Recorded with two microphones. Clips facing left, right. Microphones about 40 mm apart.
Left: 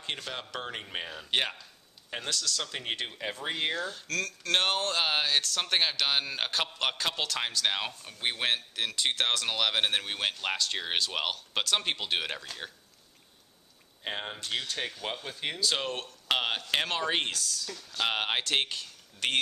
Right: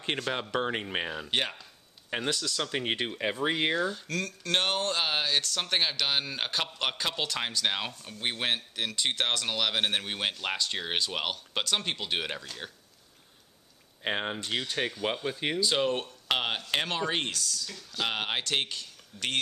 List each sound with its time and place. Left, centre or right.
0.2 s speech: centre
1.3 s speech: centre
2.0 s speech: centre
14.0 s speech: centre